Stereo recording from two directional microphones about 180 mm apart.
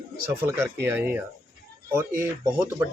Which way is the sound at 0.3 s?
10° right (ahead or behind).